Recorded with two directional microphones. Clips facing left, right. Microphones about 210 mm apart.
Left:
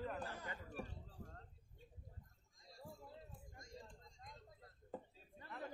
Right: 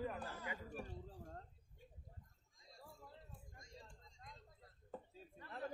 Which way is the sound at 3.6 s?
45° left (ahead or behind).